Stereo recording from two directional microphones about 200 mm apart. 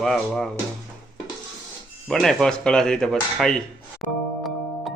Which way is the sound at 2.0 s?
Centre (ahead or behind).